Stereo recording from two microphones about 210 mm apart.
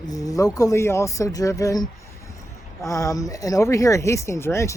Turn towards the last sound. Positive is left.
turn(degrees=15)  # may be behind; listen again after turning